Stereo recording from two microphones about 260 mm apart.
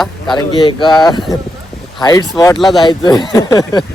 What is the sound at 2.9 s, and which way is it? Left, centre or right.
Speech, centre.